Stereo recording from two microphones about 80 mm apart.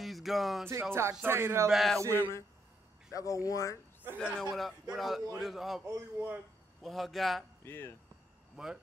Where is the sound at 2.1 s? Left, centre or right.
Left.